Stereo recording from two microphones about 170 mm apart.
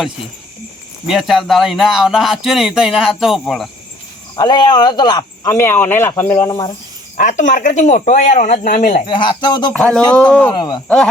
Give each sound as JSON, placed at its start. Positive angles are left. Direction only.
{"t": 1.0, "sound": "speech", "side_deg": 0}
{"t": 4.4, "sound": "speech", "side_deg": 25}
{"t": 7.2, "sound": "speech", "side_deg": 45}
{"t": 9.0, "sound": "speech", "side_deg": 30}
{"t": 9.7, "sound": "speech", "side_deg": 5}
{"t": 10.5, "sound": "speech", "side_deg": 25}